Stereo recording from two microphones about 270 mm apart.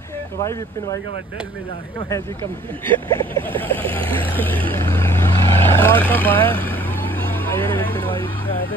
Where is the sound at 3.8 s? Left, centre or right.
Centre.